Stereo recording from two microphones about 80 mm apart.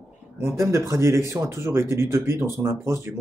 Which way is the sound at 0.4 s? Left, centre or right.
Right.